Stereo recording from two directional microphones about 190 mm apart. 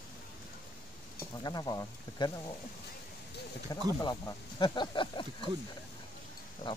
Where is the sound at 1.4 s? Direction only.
20° left (ahead or behind).